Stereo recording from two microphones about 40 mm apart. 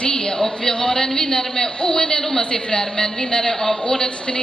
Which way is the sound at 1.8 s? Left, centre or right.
Centre.